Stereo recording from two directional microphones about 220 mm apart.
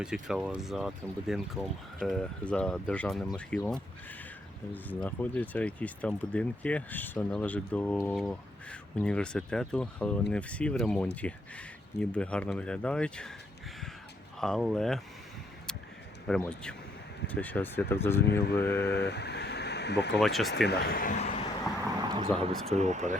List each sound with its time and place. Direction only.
0.0 s speech: 5° right (ahead or behind)
14.3 s speech: centre (ahead or behind)
16.4 s speech: 5° left (ahead or behind)
18.9 s speech: 50° left (ahead or behind)
20.2 s speech: centre (ahead or behind)
20.7 s a man's voice: 45° left (ahead or behind)
22.1 s a sound: 25° right (ahead or behind)
22.6 s speech: 30° right (ahead or behind)